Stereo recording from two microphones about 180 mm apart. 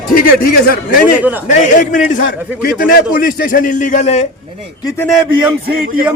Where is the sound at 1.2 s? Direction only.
10° right (ahead or behind).